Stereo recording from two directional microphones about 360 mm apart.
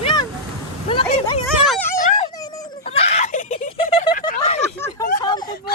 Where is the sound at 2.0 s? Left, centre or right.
Centre.